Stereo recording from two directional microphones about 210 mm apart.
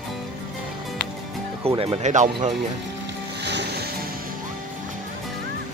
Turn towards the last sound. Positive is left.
turn(degrees=-50)  # may be behind; listen again after turning